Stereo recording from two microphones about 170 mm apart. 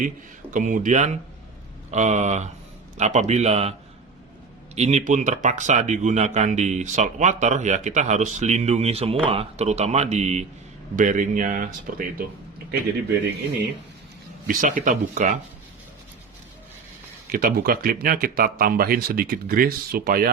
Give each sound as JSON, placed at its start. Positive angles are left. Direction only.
{"t": 0.5, "sound": "speech", "side_deg": -50}
{"t": 14.4, "sound": "speech", "side_deg": -50}
{"t": 17.3, "sound": "speech", "side_deg": -55}